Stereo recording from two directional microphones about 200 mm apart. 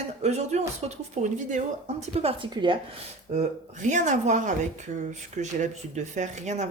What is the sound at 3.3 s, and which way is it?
A woman's voice, 35° right (ahead or behind).